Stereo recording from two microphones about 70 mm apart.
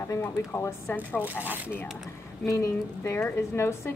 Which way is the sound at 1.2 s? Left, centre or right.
Right.